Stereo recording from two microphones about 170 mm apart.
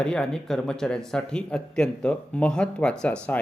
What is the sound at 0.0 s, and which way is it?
Speech, 5° left (ahead or behind).